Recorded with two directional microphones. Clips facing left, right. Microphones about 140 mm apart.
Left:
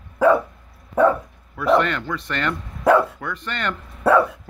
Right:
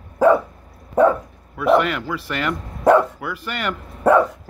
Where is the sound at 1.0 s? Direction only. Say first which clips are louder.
Right 1 dB; 5° right (ahead or behind).